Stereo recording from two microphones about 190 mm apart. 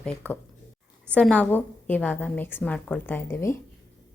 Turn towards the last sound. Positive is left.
turn(degrees=15)  # may be behind; listen again after turning